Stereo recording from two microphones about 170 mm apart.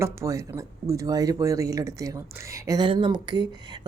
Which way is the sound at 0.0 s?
15° right (ahead or behind).